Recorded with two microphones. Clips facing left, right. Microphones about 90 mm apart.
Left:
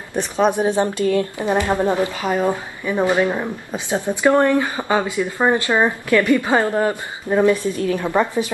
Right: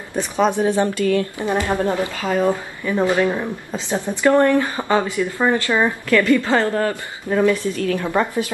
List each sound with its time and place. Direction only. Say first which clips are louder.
0.1 s a woman's voice: left 1 dB; 15° left (ahead or behind)